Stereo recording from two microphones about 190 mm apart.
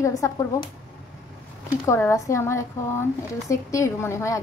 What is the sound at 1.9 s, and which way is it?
A woman's voice, 15° left (ahead or behind).